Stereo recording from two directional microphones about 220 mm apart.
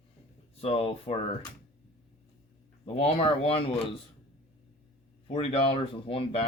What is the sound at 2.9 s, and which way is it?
Speech, 25° left (ahead or behind).